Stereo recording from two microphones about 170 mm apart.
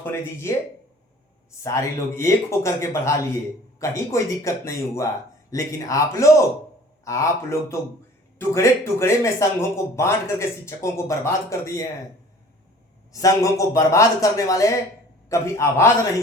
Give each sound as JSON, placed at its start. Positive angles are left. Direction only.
{"t": 0.0, "sound": "a man's voice", "side_deg": 15}
{"t": 13.1, "sound": "a man's voice", "side_deg": 20}